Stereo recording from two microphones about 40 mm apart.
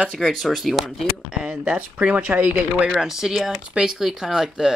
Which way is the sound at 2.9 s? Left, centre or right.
Centre.